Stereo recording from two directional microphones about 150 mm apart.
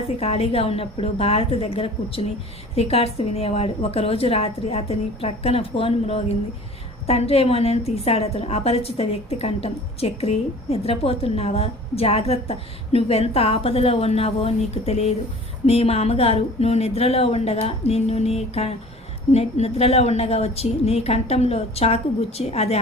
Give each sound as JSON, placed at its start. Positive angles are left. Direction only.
{"t": 0.2, "sound": "a woman's voice", "side_deg": 45}